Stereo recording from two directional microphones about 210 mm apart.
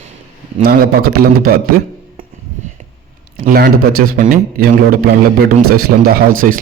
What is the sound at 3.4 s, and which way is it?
A man's voice, 45° right (ahead or behind).